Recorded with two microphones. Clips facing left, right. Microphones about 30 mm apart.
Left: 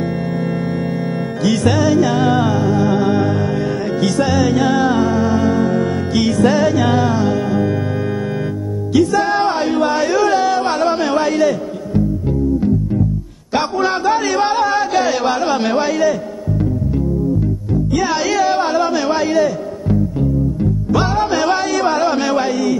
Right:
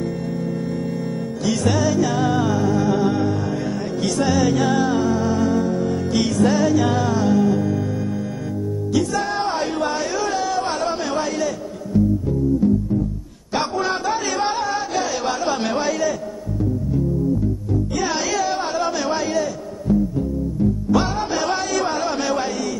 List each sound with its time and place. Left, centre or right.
1.4 s music: left
4.2 s music: left
8.9 s a sound: left
13.5 s a sound: left
14.6 s music: left
15.2 s music: left
18.1 s music: left
18.9 s a man's voice: left
20.9 s music: left
21.5 s music: left